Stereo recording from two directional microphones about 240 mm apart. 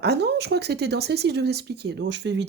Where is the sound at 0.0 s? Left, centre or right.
Right.